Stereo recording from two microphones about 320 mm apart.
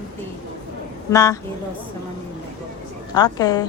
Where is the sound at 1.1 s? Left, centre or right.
Centre.